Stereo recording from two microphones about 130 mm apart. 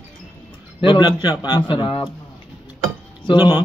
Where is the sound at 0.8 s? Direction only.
35° left (ahead or behind).